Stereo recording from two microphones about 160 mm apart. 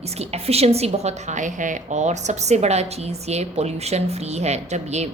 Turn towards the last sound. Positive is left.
turn(degrees=-45)  # may be behind; listen again after turning